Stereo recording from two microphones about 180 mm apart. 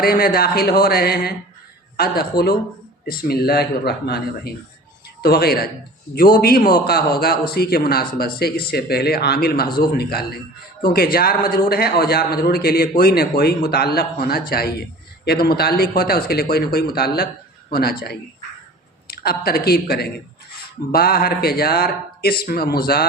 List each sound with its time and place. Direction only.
0.0 s a man's voice: 55° left (ahead or behind)